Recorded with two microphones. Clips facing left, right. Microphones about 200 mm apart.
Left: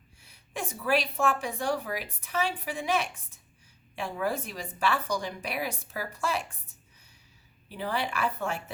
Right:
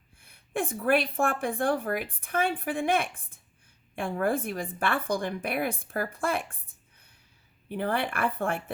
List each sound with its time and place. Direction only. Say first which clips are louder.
0.2 s a woman's voice: right 6 dB; 55° right (ahead or behind)